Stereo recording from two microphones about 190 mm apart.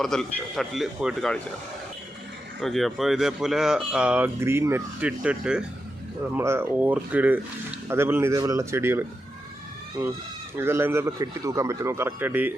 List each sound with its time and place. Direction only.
0.0 s speech: centre (ahead or behind)
2.6 s a man's voice: centre (ahead or behind)